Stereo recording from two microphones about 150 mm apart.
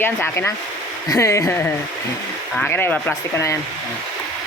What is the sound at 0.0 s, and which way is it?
Speech, 15° left (ahead or behind).